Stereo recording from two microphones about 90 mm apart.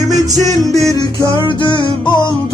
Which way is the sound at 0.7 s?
45° left (ahead or behind).